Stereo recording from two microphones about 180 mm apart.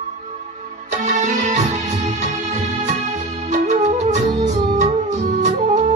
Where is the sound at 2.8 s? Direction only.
40° right (ahead or behind).